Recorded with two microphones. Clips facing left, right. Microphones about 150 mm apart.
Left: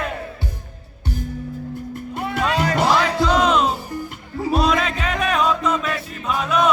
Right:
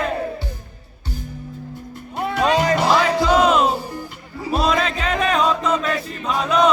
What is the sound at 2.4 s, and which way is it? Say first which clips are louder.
Music: right 3 dB; 25° right (ahead or behind).